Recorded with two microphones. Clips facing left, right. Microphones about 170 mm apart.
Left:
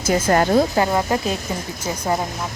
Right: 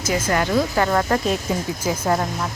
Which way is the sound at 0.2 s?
35° left (ahead or behind).